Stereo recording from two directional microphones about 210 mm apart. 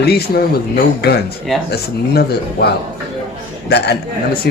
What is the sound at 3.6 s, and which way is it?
Speech, 50° left (ahead or behind).